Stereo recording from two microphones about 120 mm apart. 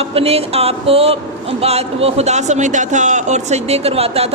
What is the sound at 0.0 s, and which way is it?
A woman's voice, 55° right (ahead or behind).